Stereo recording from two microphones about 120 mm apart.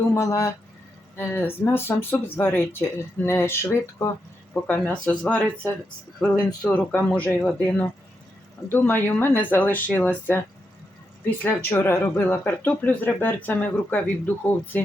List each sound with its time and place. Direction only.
0.1 s speech: 25° left (ahead or behind)
11.4 s speech: 15° left (ahead or behind)